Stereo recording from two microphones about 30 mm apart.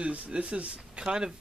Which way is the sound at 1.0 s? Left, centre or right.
Right.